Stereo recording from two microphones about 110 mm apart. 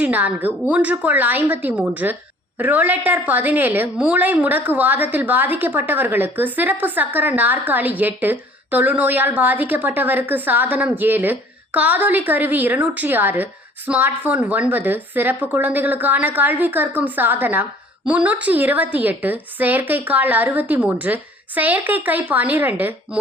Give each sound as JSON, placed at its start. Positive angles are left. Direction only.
{"t": 0.0, "sound": "a woman's voice", "side_deg": -15}